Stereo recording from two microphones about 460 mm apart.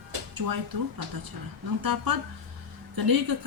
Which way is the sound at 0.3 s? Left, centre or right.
Right.